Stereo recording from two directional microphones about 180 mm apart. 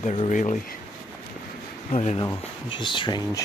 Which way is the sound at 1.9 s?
35° left (ahead or behind).